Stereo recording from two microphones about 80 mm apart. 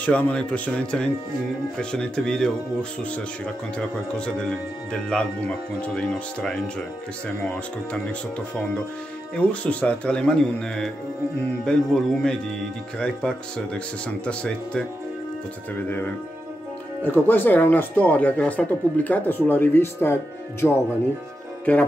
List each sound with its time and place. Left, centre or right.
0.0 s speech: centre
9.3 s speech: centre
13.7 s speech: centre
17.0 s speech: left